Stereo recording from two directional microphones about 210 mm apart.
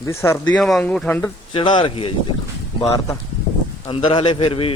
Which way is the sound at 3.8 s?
25° left (ahead or behind).